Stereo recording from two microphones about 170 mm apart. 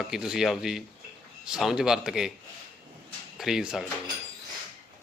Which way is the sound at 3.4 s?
5° right (ahead or behind).